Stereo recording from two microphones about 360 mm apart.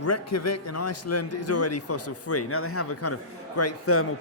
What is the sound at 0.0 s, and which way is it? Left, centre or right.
Speech, left.